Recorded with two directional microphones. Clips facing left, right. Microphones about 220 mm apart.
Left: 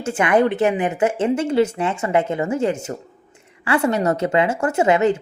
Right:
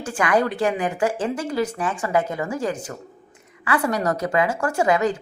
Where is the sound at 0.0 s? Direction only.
25° left (ahead or behind).